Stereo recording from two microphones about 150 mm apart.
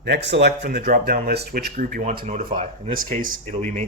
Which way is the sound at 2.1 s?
65° right (ahead or behind).